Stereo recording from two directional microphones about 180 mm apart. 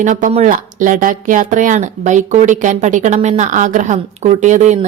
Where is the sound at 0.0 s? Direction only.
45° right (ahead or behind).